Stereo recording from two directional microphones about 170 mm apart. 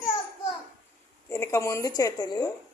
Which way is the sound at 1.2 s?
15° left (ahead or behind).